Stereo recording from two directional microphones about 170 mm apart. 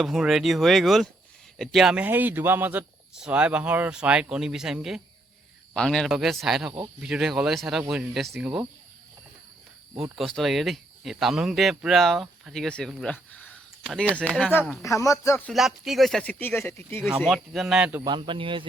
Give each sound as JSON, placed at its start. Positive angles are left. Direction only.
{"t": 0.0, "sound": "a man's voice", "side_deg": 0}
{"t": 10.0, "sound": "speech", "side_deg": 0}
{"t": 14.8, "sound": "speech", "side_deg": 20}
{"t": 15.4, "sound": "speech", "side_deg": 0}
{"t": 17.0, "sound": "speech", "side_deg": 0}
{"t": 18.0, "sound": "speech", "side_deg": -30}